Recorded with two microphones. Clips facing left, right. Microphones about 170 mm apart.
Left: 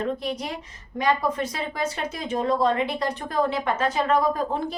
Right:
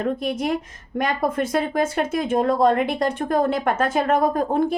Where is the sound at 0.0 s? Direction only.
50° right (ahead or behind).